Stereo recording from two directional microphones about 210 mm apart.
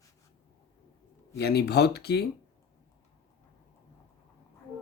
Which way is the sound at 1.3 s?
50° left (ahead or behind).